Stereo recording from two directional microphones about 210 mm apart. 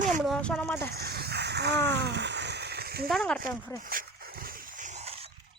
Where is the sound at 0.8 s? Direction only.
50° right (ahead or behind).